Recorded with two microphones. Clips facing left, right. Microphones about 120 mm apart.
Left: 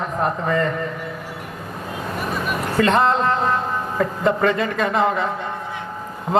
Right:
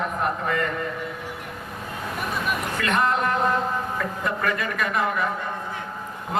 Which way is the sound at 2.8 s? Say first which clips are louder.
Left 7 dB; 30° left (ahead or behind).